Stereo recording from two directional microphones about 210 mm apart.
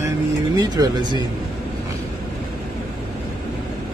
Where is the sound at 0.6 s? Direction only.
20° right (ahead or behind).